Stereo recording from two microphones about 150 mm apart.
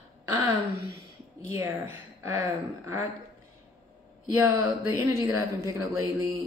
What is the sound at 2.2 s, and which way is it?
Speech, 20° right (ahead or behind).